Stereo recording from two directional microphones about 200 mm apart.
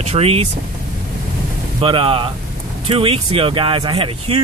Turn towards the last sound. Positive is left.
turn(degrees=-25)  # may be behind; listen again after turning